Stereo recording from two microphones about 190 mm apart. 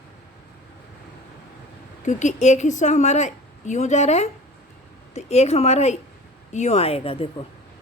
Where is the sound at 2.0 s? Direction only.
40° left (ahead or behind).